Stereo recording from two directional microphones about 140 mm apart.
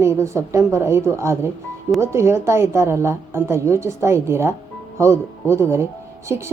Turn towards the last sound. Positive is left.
turn(degrees=-20)  # may be behind; listen again after turning